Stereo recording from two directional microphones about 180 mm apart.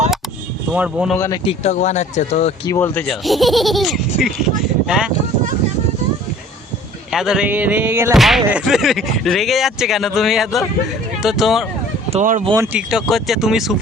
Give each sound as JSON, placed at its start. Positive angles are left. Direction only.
{"t": 0.7, "sound": "speech", "side_deg": -5}
{"t": 1.1, "sound": "speech", "side_deg": 15}
{"t": 1.5, "sound": "speech", "side_deg": 40}
{"t": 2.6, "sound": "speech", "side_deg": 10}
{"t": 7.1, "sound": "speech", "side_deg": 0}
{"t": 8.1, "sound": "speech", "side_deg": 0}
{"t": 12.1, "sound": "speech", "side_deg": -45}
{"t": 12.5, "sound": "speech", "side_deg": -15}
{"t": 12.9, "sound": "speech", "side_deg": 0}